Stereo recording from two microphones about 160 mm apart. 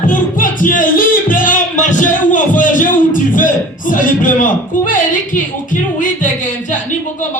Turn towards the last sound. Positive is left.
turn(degrees=55)  # may be behind; listen again after turning